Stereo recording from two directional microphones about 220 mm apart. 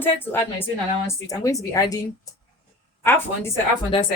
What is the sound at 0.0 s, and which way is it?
A woman's voice, 10° left (ahead or behind).